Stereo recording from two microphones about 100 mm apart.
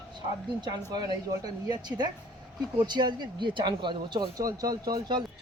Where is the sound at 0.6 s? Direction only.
40° right (ahead or behind).